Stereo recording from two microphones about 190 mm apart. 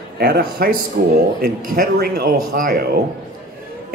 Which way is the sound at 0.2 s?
55° right (ahead or behind).